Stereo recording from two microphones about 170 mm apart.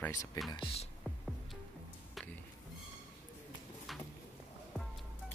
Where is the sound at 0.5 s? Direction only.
30° left (ahead or behind).